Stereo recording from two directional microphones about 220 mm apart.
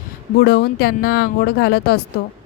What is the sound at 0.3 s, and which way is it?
A woman's voice, 50° left (ahead or behind).